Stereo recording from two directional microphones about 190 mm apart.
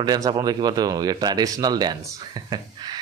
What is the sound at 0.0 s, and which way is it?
Speech, 20° right (ahead or behind).